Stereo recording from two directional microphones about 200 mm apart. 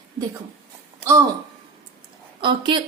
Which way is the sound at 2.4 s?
25° right (ahead or behind).